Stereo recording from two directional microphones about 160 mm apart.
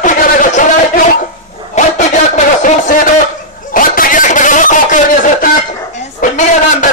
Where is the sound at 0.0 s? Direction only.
55° left (ahead or behind).